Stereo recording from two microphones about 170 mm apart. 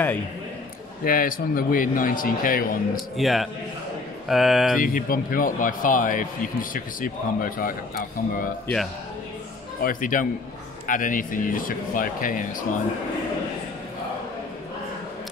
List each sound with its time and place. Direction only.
1.0 s a man's voice: 55° left (ahead or behind)
3.2 s speech: centre (ahead or behind)
4.7 s a man's voice: 55° left (ahead or behind)
9.8 s speech: 55° left (ahead or behind)